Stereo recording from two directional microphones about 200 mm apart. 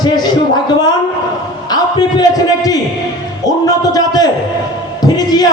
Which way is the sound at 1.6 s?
20° left (ahead or behind).